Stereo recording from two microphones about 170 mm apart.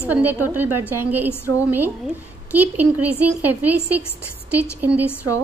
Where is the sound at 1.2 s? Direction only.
15° left (ahead or behind).